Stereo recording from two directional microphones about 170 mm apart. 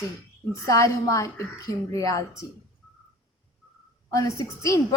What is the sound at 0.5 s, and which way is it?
A woman's voice, 20° left (ahead or behind).